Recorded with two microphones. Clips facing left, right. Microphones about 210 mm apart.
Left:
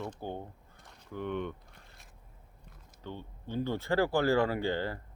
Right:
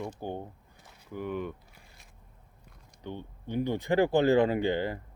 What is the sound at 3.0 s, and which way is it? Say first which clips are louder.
A man's voice: right 3 dB; 15° right (ahead or behind).